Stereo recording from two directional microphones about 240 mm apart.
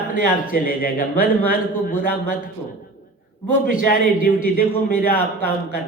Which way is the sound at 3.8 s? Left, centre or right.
Left.